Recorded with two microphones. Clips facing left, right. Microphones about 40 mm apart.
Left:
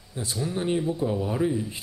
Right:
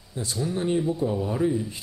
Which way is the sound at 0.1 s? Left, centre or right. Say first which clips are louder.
Right 1 dB; centre.